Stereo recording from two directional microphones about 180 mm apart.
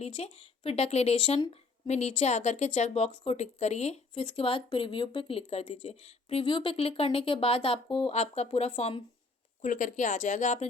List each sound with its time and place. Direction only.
0.0 s a woman's voice: 35° left (ahead or behind)
9.6 s speech: 45° left (ahead or behind)